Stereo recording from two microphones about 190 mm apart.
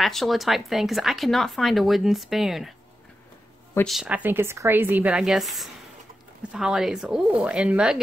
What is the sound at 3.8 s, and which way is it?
A woman's voice, 5° right (ahead or behind).